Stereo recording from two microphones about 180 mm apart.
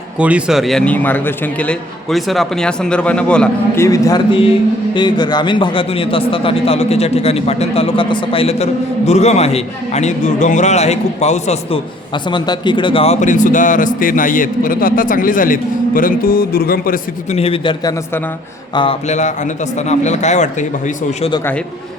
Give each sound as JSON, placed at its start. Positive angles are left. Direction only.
{"t": 0.2, "sound": "a man's voice", "side_deg": -5}
{"t": 3.8, "sound": "a man's voice", "side_deg": 20}
{"t": 12.1, "sound": "speech", "side_deg": 25}
{"t": 17.3, "sound": "speech", "side_deg": 30}
{"t": 19.0, "sound": "a man's voice", "side_deg": 40}